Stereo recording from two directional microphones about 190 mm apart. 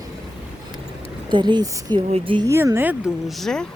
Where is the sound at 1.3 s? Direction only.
25° right (ahead or behind).